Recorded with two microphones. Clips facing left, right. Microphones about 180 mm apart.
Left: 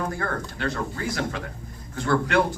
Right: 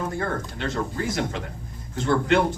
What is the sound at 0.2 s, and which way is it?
Speech, 20° right (ahead or behind).